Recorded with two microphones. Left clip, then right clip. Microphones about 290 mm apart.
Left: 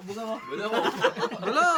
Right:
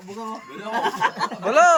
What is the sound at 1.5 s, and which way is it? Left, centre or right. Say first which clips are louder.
Speech: right 8 dB; centre.